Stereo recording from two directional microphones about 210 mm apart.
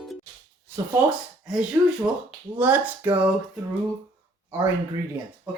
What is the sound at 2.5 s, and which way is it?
Speech, 10° right (ahead or behind).